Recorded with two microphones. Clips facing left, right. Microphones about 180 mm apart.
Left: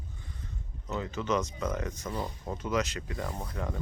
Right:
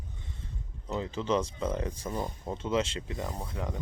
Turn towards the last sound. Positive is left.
turn(degrees=-20)  # may be behind; listen again after turning